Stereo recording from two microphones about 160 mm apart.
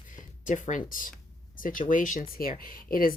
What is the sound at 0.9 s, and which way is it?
Speech, 60° left (ahead or behind).